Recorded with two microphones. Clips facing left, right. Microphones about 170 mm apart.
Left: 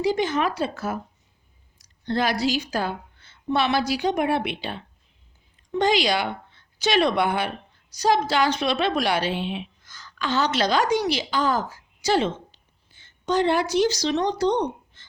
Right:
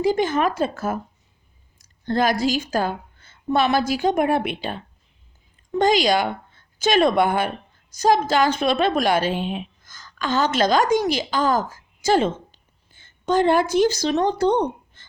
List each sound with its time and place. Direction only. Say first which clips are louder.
0.0 s a woman's voice: right 3 dB; 50° right (ahead or behind)